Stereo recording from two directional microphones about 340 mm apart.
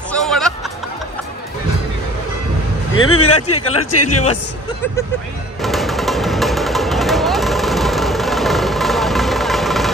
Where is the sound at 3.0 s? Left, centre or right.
Left.